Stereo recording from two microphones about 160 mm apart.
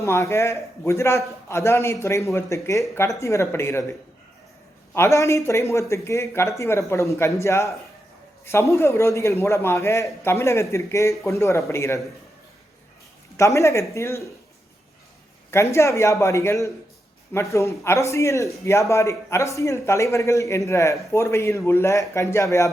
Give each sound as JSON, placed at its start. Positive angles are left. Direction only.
{"t": 0.0, "sound": "a man's voice", "side_deg": 20}
{"t": 4.9, "sound": "a man's voice", "side_deg": 20}
{"t": 13.3, "sound": "a man's voice", "side_deg": 20}
{"t": 15.4, "sound": "a man's voice", "side_deg": 15}